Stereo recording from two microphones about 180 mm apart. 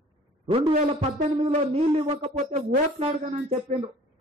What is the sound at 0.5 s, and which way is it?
A man's voice, 30° right (ahead or behind).